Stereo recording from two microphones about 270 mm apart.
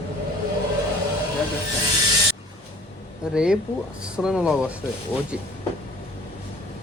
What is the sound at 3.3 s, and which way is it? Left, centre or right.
Speech, centre.